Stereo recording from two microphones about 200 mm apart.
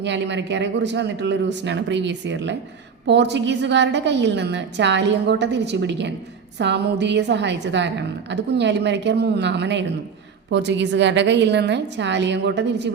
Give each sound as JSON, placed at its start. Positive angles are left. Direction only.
{"t": 0.0, "sound": "a woman's voice", "side_deg": -60}